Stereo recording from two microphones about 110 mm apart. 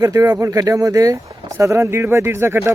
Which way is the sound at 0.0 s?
30° right (ahead or behind).